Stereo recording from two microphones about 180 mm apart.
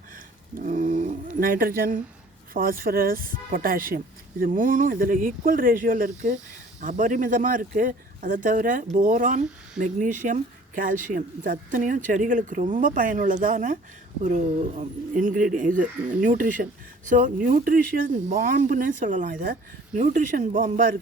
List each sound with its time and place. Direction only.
0.6 s speech: 45° right (ahead or behind)